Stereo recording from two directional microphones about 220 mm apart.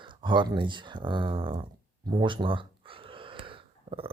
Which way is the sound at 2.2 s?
20° right (ahead or behind).